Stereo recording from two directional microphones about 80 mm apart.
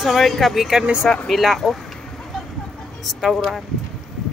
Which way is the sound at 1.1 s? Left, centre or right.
Centre.